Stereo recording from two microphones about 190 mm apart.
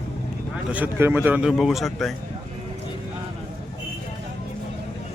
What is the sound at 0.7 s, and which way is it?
Speech, 10° right (ahead or behind).